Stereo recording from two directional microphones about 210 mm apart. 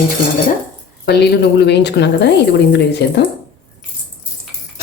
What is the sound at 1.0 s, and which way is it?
A woman's voice, 50° left (ahead or behind).